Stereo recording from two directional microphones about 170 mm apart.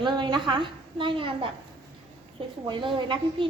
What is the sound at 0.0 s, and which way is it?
A woman's voice, 25° right (ahead or behind).